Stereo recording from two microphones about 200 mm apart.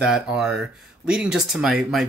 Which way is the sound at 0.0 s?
5° right (ahead or behind).